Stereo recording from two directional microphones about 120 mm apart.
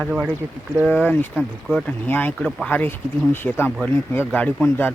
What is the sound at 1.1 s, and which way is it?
Speech, 15° left (ahead or behind).